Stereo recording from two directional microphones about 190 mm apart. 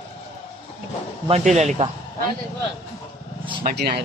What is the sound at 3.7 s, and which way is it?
Speech, 60° right (ahead or behind).